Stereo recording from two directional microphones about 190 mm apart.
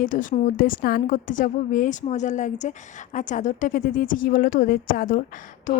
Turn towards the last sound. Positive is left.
turn(degrees=45)  # may be behind; listen again after turning